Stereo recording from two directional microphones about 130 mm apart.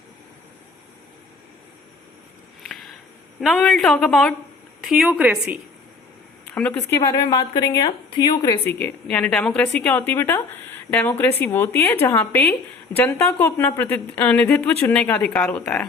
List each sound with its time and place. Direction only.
2.6 s a sound: centre (ahead or behind)
3.4 s speech: 5° left (ahead or behind)
4.8 s a woman's voice: 5° right (ahead or behind)
6.5 s speech: 10° left (ahead or behind)
6.9 s a woman's voice: 30° left (ahead or behind)
8.8 s speech: 10° left (ahead or behind)